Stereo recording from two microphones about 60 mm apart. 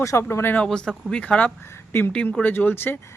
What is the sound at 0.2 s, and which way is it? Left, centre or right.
Speech, left.